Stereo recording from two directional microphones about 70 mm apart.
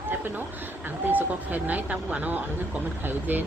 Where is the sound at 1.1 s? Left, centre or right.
Right.